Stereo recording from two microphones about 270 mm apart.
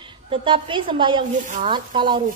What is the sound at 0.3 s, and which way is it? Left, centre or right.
A woman's voice, centre.